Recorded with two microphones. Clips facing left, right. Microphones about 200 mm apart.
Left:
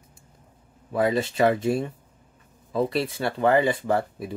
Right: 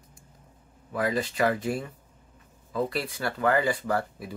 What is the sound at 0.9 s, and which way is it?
Speech, 25° left (ahead or behind).